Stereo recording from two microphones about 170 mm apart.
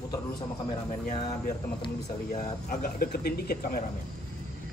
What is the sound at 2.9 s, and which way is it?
Speech, 65° left (ahead or behind).